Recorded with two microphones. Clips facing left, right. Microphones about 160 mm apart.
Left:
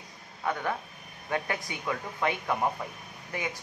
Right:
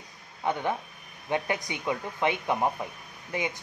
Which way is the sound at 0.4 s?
20° right (ahead or behind).